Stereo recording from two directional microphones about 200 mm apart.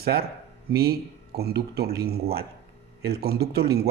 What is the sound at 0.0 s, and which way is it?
Speech, 50° right (ahead or behind).